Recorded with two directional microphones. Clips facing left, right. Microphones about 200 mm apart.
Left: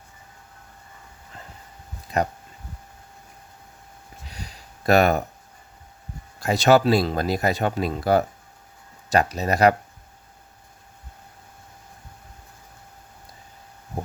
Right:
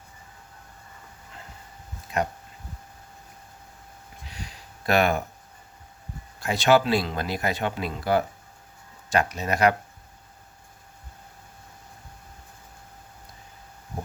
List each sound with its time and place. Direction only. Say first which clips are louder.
4.9 s speech: left 4 dB; 40° left (ahead or behind)
6.4 s speech: left 3 dB; 40° left (ahead or behind)